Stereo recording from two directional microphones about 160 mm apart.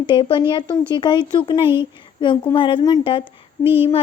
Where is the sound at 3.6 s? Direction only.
10° right (ahead or behind).